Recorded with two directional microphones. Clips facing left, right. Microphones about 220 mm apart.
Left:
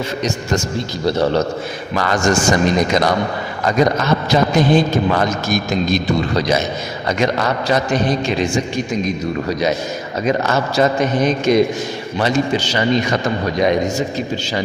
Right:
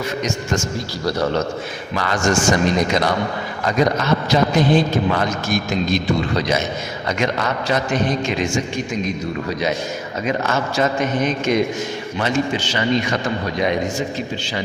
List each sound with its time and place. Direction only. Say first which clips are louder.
0.2 s a man's voice: left 2 dB; 35° left (ahead or behind)
2.0 s a man's voice: left 2 dB; 45° left (ahead or behind)